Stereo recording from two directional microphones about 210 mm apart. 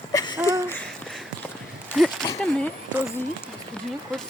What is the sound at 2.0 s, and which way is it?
Speech, centre (ahead or behind).